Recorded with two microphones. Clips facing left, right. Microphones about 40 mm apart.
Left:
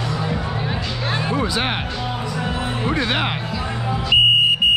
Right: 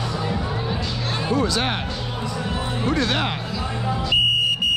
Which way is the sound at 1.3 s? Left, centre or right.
Centre.